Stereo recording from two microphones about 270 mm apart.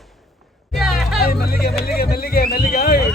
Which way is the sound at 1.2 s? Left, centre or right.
Left.